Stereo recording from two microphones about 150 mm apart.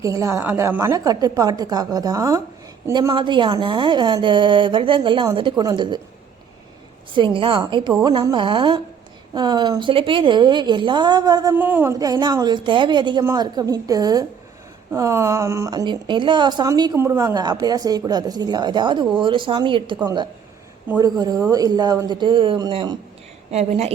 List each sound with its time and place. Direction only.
0.0 s a woman's voice: 20° right (ahead or behind)
7.1 s a woman's voice: 35° right (ahead or behind)
11.5 s a woman's voice: 15° right (ahead or behind); by 20.0 s 30° right (ahead or behind)
21.0 s speech: 25° right (ahead or behind)
23.5 s a woman's voice: 45° right (ahead or behind)